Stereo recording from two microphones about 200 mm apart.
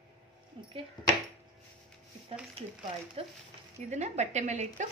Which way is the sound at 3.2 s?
30° right (ahead or behind).